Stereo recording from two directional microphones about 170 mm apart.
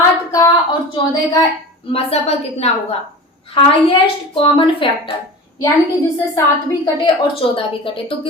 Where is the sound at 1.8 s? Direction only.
35° left (ahead or behind).